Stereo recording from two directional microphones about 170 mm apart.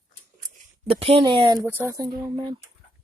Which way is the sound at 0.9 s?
35° right (ahead or behind).